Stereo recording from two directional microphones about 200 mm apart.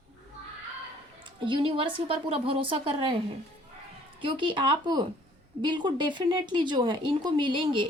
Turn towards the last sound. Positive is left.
turn(degrees=-25)  # may be behind; listen again after turning